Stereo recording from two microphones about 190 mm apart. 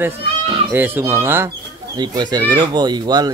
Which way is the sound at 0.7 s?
10° right (ahead or behind).